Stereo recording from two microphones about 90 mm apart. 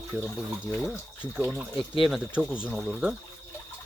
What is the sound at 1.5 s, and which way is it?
Speech, centre (ahead or behind).